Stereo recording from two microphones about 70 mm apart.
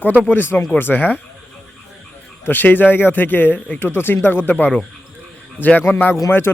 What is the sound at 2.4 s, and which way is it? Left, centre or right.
Speech, left.